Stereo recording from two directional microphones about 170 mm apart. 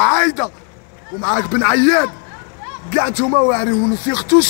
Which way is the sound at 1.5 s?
20° left (ahead or behind).